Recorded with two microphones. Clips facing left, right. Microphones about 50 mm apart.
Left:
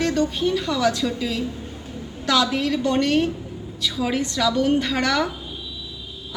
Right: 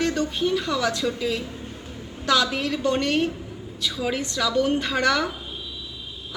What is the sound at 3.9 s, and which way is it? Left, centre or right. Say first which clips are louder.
A woman's voice: left 3 dB; centre.